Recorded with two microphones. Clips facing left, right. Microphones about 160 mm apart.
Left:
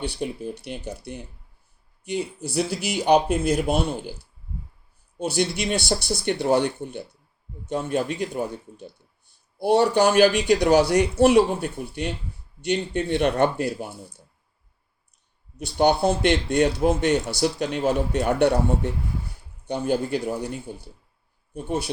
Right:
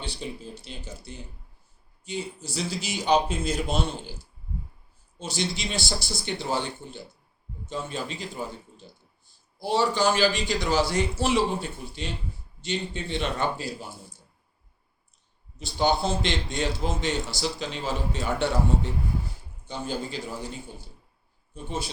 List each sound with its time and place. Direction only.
0.0 s speech: 60° left (ahead or behind)
5.1 s speech: 60° left (ahead or behind)
15.5 s speech: 65° left (ahead or behind)